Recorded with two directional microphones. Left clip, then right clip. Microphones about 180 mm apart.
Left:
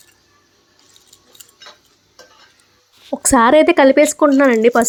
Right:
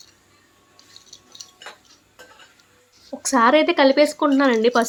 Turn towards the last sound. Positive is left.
turn(degrees=35)  # may be behind; listen again after turning